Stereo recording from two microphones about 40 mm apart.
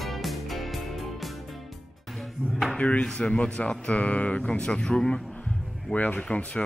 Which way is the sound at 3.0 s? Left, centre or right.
Left.